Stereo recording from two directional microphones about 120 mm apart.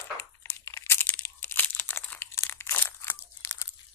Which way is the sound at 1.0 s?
15° left (ahead or behind).